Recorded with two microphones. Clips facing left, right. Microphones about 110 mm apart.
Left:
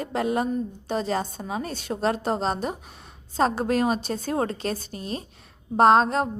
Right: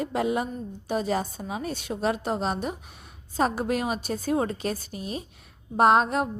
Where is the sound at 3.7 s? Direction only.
10° right (ahead or behind).